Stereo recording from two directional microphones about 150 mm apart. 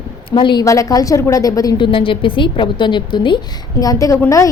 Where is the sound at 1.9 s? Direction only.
35° left (ahead or behind).